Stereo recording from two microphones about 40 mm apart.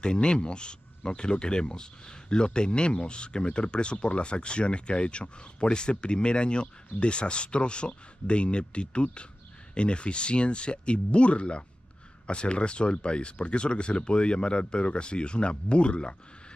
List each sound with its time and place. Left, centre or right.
0.0 s speech: left